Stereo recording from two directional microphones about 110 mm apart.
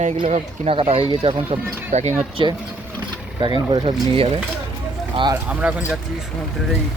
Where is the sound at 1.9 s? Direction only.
85° right.